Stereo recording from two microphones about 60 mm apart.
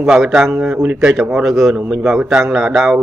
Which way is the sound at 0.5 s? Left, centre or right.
Right.